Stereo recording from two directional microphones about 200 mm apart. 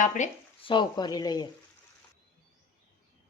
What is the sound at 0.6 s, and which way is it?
Speech, 25° left (ahead or behind).